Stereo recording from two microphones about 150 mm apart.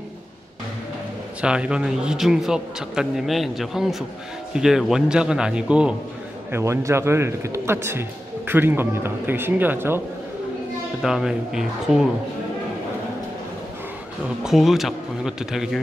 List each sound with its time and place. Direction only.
1.4 s a man's voice: 5° right (ahead or behind)
6.5 s a man's voice: 20° right (ahead or behind)
11.0 s a man's voice: 5° right (ahead or behind)
14.4 s a man's voice: centre (ahead or behind)